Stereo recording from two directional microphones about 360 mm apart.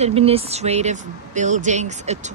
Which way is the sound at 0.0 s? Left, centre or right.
Centre.